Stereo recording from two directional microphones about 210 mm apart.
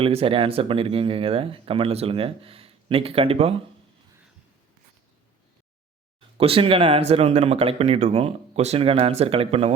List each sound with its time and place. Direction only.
0.0 s speech: 25° right (ahead or behind)
6.3 s speech: 25° right (ahead or behind)